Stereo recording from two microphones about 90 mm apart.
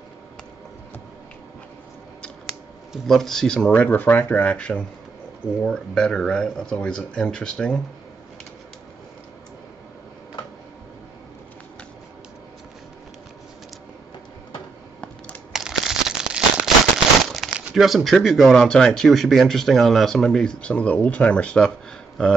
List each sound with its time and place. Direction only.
2.9 s speech: 5° left (ahead or behind)
3.8 s speech: 20° left (ahead or behind)
15.5 s crumpling: 5° right (ahead or behind)
17.4 s a sound: centre (ahead or behind)
17.7 s speech: centre (ahead or behind)